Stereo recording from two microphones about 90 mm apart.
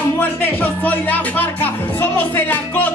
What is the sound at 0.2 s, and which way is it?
Music, 20° left (ahead or behind).